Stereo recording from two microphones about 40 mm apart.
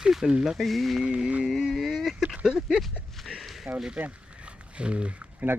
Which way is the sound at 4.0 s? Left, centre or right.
Right.